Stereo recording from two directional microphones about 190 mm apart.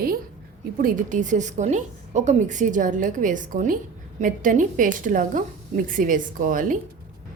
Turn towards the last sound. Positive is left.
turn(degrees=-45)  # may be behind; listen again after turning